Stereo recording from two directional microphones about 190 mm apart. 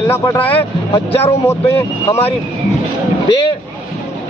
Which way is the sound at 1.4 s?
15° left (ahead or behind).